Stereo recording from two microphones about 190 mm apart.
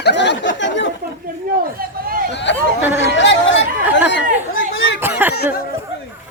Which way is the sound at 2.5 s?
70° left (ahead or behind).